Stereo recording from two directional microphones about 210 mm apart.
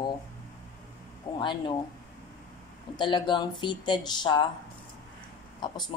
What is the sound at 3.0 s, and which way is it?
Speech, 20° left (ahead or behind).